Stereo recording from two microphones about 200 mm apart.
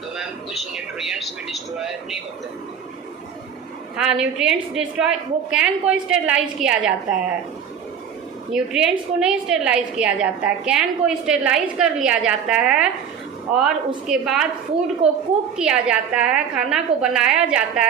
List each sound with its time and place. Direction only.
0.2 s a woman's voice: centre (ahead or behind)
3.9 s a woman's voice: 5° right (ahead or behind)
8.5 s a woman's voice: 5° right (ahead or behind)
15.0 s a woman's voice: 30° right (ahead or behind)
15.5 s a woman's voice: 5° right (ahead or behind)